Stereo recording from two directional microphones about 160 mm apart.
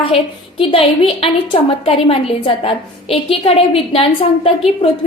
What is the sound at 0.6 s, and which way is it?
A woman's voice, 35° left (ahead or behind).